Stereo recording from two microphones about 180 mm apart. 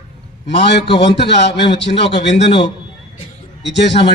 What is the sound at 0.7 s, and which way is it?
A man's voice, 70° left (ahead or behind).